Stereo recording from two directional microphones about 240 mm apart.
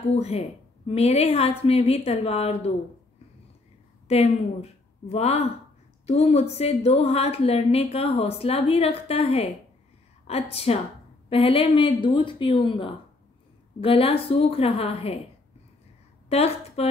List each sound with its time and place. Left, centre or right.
0.1 s a woman's voice: left
4.1 s a woman's voice: left
16.3 s a woman's voice: left